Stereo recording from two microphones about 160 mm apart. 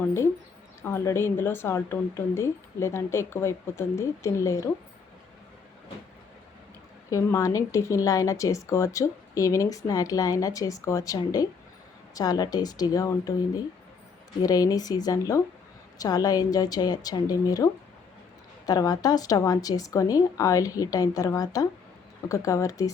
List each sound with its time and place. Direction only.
0.8 s speech: 15° left (ahead or behind)
7.1 s speech: 20° left (ahead or behind)
14.4 s speech: 25° left (ahead or behind)